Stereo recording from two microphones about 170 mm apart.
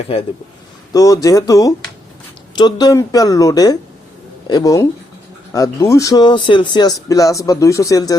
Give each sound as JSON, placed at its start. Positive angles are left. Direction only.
{"t": 0.9, "sound": "speech", "side_deg": 20}